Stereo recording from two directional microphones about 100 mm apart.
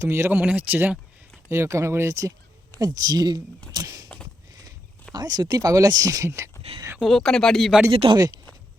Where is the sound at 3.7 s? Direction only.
40° right (ahead or behind).